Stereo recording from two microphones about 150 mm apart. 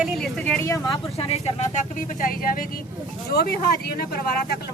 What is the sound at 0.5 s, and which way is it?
Speech, 20° left (ahead or behind).